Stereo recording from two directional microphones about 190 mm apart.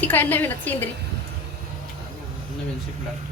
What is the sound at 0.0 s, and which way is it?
Speech, 10° left (ahead or behind).